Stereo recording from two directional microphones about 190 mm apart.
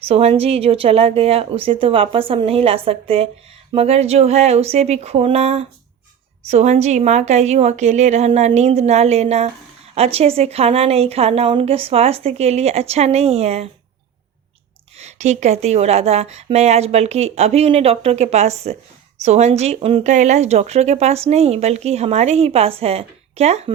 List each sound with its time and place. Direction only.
0.1 s speech: 30° right (ahead or behind)
14.9 s speech: 35° right (ahead or behind)